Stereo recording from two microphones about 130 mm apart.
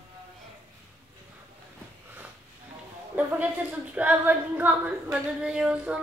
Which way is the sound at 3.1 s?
10° right (ahead or behind).